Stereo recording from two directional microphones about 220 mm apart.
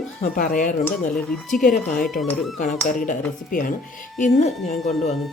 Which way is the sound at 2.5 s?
35° left (ahead or behind).